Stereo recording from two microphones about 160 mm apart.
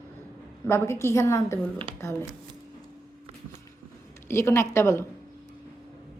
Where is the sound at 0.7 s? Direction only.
15° left (ahead or behind).